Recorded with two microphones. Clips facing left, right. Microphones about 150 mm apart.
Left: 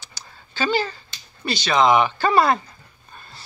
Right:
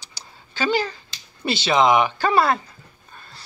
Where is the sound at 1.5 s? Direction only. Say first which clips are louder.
Even; 25° right (ahead or behind); by 2.6 s 5° right (ahead or behind).